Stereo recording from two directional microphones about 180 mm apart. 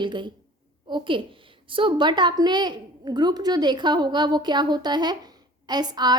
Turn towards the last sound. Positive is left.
turn(degrees=-25)  # may be behind; listen again after turning